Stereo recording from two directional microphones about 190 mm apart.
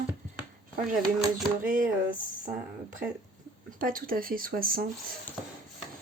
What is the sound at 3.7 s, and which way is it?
Speech, 45° right (ahead or behind).